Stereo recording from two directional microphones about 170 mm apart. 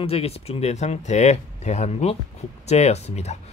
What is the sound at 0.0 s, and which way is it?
Speech, 35° left (ahead or behind).